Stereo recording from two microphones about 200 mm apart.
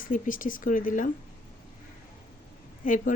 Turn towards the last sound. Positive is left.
turn(degrees=40)  # may be behind; listen again after turning